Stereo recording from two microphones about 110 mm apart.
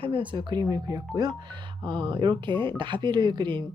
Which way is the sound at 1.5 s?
45° right (ahead or behind).